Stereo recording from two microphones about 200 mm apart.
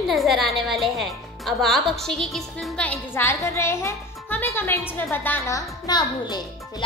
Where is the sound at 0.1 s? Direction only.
Centre (ahead or behind).